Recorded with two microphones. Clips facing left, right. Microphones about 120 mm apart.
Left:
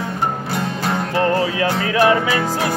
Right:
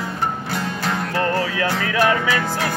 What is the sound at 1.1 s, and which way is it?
Music, 20° left (ahead or behind).